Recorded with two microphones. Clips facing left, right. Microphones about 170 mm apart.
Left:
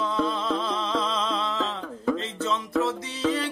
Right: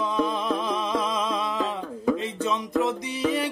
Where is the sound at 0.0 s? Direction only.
15° right (ahead or behind).